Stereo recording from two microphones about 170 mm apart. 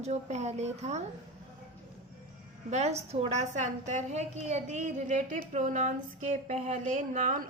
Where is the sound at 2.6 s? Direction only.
40° right (ahead or behind).